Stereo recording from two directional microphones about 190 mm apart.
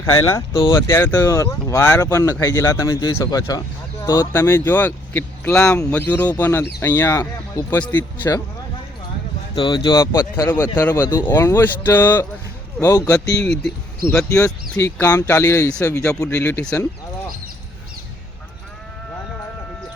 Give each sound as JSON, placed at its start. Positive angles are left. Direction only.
{"t": 0.0, "sound": "speech", "side_deg": 15}
{"t": 9.6, "sound": "speech", "side_deg": 25}
{"t": 13.4, "sound": "speech", "side_deg": 5}